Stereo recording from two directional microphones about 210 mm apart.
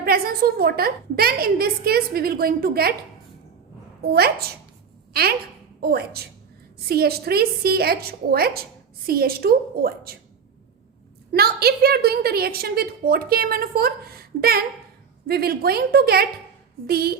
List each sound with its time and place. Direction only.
0.0 s a woman's voice: 45° right (ahead or behind)
4.1 s a woman's voice: 50° right (ahead or behind)
5.8 s a woman's voice: 50° right (ahead or behind)
11.3 s a woman's voice: 50° right (ahead or behind)